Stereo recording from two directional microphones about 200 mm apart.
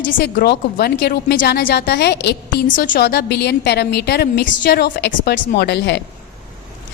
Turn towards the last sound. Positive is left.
turn(degrees=55)  # may be behind; listen again after turning